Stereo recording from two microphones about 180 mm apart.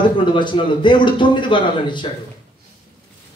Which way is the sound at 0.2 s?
25° left (ahead or behind).